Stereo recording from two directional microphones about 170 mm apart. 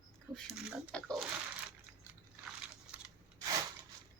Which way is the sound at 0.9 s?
Centre (ahead or behind).